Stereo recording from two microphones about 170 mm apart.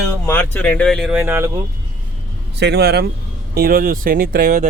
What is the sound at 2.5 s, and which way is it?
Speech, 80° right.